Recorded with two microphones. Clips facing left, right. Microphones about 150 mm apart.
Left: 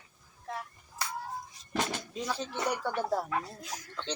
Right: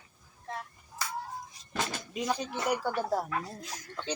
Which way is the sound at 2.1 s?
15° right (ahead or behind).